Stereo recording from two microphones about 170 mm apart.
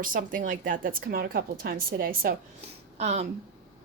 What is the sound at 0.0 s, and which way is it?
A woman's voice, 55° right (ahead or behind).